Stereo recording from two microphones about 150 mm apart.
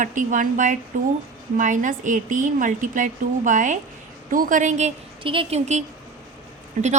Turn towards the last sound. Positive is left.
turn(degrees=-60)  # may be behind; listen again after turning